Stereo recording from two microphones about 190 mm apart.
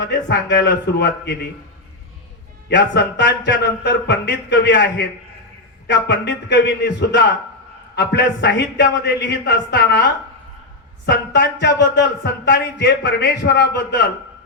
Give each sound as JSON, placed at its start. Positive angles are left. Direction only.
{"t": 0.0, "sound": "a man's voice", "side_deg": 65}
{"t": 2.6, "sound": "a man's voice", "side_deg": 60}